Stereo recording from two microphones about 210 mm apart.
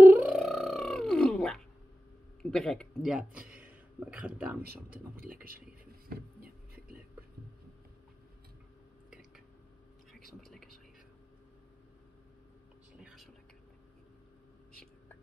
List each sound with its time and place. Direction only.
0.0 s a sound: 5° right (ahead or behind)
2.4 s a man's voice: 5° left (ahead or behind)
5.1 s speech: 45° right (ahead or behind)
10.5 s whispering: centre (ahead or behind)
13.0 s whispering: centre (ahead or behind)